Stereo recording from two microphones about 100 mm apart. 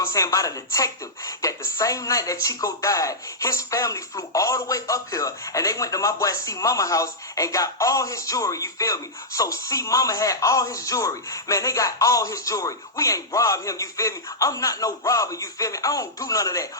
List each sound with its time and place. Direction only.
0.1 s a woman's voice: 35° left (ahead or behind)